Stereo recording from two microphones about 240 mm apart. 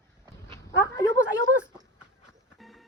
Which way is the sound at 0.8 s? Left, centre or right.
Centre.